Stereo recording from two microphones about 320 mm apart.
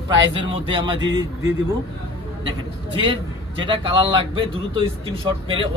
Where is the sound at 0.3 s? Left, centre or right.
Centre.